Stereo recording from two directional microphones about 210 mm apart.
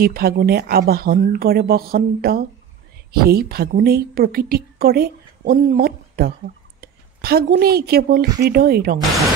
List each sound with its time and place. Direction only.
0.0 s a woman's voice: 45° right (ahead or behind)